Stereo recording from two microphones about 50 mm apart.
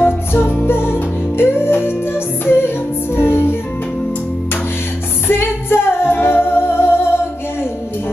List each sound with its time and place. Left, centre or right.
0.0 s music: left
5.3 s music: left